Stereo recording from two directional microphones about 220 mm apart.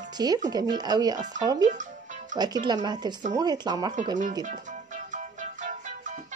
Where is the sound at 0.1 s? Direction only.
20° right (ahead or behind).